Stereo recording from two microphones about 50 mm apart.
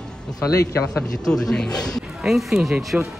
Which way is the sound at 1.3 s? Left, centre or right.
Centre.